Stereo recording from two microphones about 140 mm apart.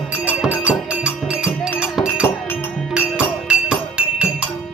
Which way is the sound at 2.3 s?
15° left (ahead or behind).